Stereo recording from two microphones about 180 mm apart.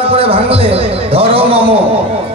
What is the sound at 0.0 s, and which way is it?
A man's voice, 30° right (ahead or behind).